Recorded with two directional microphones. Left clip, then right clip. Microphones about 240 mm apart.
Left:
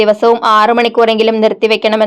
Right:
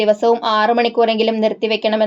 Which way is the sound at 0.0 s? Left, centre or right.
Left.